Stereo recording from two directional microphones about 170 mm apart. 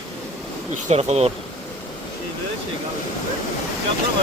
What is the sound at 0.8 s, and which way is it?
Speech, 40° right (ahead or behind).